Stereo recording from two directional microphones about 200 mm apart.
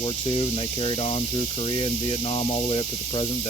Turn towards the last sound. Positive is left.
turn(degrees=25)  # may be behind; listen again after turning